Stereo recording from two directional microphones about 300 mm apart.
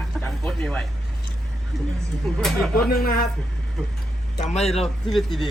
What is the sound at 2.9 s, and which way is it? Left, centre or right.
Speech, left.